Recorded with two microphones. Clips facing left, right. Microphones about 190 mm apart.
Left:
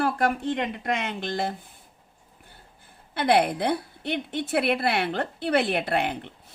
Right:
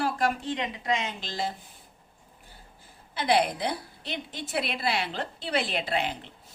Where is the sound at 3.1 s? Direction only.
55° left (ahead or behind).